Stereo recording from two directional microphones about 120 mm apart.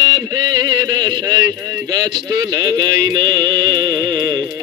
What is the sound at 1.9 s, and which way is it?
Mantra, 35° right (ahead or behind).